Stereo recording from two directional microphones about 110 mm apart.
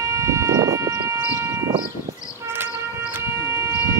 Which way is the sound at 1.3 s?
25° right (ahead or behind).